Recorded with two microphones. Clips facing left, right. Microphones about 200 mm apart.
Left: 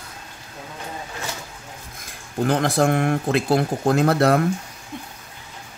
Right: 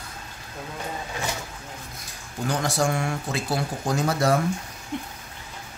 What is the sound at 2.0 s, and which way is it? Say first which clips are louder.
Speech: left 8 dB; 55° left (ahead or behind).